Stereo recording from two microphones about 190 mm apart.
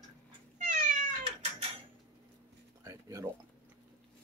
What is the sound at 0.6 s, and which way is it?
Cat, 45° right (ahead or behind).